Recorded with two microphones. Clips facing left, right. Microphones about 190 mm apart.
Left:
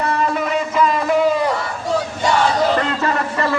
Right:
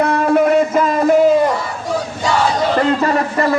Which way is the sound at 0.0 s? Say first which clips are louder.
Right 7 dB; 55° right (ahead or behind).